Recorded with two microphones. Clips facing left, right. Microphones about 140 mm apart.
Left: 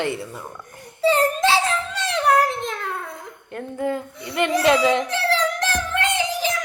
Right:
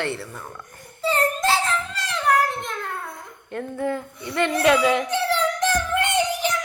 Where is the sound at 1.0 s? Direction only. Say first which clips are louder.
Left 4 dB; 85° left.